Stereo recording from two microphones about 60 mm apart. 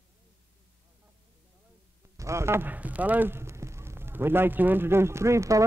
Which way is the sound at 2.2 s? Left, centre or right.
Right.